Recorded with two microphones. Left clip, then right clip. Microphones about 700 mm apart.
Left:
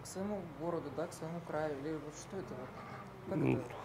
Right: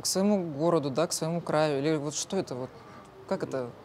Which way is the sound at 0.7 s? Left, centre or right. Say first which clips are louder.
Right 13 dB; right.